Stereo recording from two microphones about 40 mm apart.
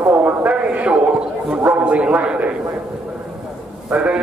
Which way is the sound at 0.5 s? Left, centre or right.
Right.